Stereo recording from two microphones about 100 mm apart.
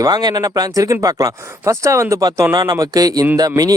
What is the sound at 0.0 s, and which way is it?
Speech, 45° right (ahead or behind).